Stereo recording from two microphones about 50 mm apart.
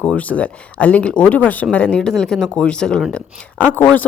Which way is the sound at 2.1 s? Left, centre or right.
Centre.